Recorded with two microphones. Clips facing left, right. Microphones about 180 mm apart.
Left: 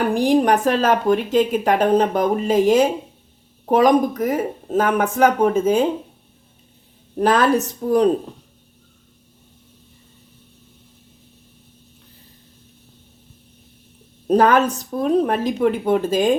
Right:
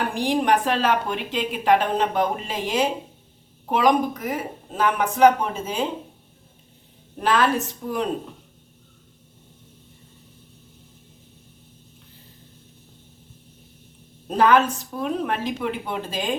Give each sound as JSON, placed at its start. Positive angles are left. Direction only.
{"t": 0.1, "sound": "a woman's voice", "side_deg": 45}
{"t": 7.2, "sound": "speech", "side_deg": 40}
{"t": 14.3, "sound": "speech", "side_deg": 40}